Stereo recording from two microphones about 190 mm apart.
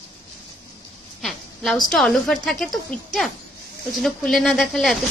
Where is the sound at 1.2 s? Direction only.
Centre (ahead or behind).